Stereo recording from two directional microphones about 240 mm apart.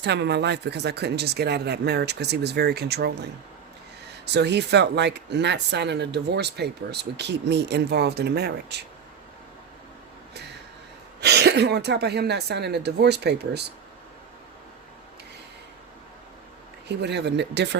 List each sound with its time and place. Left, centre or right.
0.0 s speech: right
4.3 s speech: right
11.2 s speech: right
16.9 s speech: right